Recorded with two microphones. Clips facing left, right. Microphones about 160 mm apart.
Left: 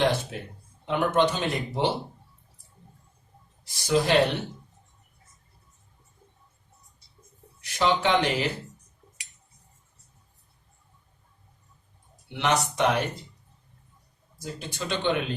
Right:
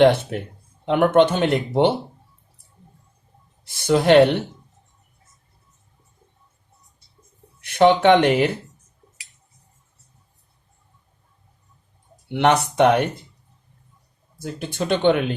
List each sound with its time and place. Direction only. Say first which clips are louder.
0.0 s speech: right 10 dB; 65° right (ahead or behind)
3.7 s speech: right 7 dB; 65° right (ahead or behind)
7.6 s speech: right 9 dB; 60° right (ahead or behind)
12.3 s speech: right 7 dB; 60° right (ahead or behind)
14.4 s speech: right 8 dB; 55° right (ahead or behind)